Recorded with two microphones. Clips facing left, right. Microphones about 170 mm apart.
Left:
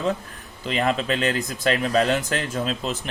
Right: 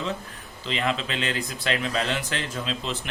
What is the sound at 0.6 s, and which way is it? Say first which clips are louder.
Speech: left 4 dB; 45° left (ahead or behind).